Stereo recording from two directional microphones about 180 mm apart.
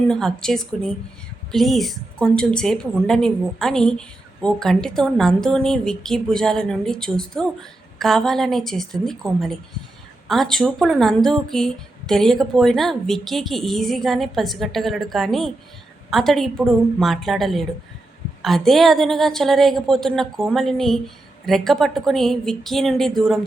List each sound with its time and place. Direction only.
0.1 s speech: 5° left (ahead or behind)